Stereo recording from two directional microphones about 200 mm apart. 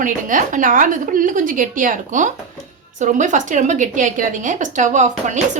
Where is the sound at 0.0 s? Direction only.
40° right (ahead or behind).